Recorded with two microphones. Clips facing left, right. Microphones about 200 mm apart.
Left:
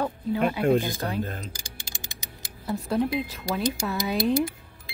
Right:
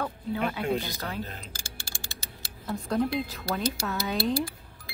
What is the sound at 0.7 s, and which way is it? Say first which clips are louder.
Speech: left 6 dB; 50° left (ahead or behind).